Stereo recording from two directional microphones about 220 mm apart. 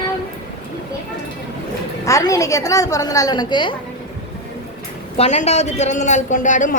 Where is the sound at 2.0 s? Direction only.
15° left (ahead or behind).